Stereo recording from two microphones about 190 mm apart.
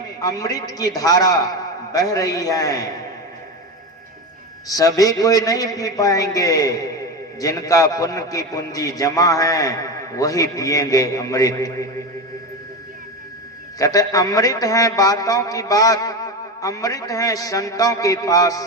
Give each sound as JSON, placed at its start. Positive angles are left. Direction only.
{"t": 0.2, "sound": "a man's voice", "side_deg": 20}
{"t": 4.7, "sound": "a man's voice", "side_deg": 20}
{"t": 13.7, "sound": "a man's voice", "side_deg": 20}